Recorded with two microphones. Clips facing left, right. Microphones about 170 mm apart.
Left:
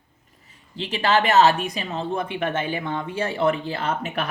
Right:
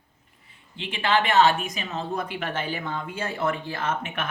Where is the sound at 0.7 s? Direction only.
40° left (ahead or behind).